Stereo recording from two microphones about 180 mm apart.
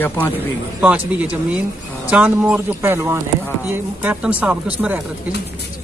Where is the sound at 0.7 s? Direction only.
10° right (ahead or behind).